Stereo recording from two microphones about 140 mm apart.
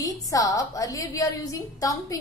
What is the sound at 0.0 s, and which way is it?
A woman's voice, 25° left (ahead or behind).